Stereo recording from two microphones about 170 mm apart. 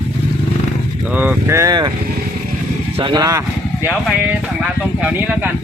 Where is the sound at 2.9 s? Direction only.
25° right (ahead or behind).